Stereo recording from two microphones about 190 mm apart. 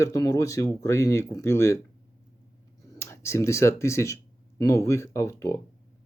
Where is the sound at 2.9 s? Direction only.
15° left (ahead or behind).